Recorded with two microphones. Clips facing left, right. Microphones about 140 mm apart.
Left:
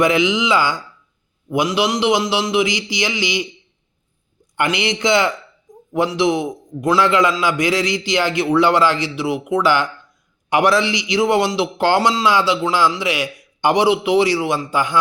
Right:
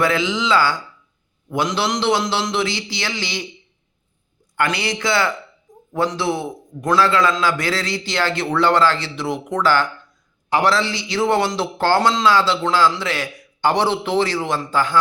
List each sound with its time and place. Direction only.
0.0 s a man's voice: 15° left (ahead or behind)
4.5 s a man's voice: 20° left (ahead or behind)